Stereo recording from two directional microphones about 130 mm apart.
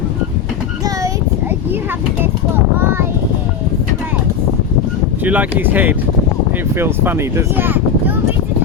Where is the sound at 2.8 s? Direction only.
20° right (ahead or behind).